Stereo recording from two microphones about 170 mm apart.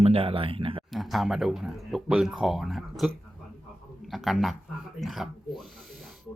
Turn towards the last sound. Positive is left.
turn(degrees=0)  # may be behind; listen again after turning